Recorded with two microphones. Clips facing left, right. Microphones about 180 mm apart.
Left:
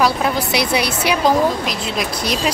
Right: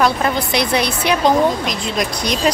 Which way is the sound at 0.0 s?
5° left (ahead or behind).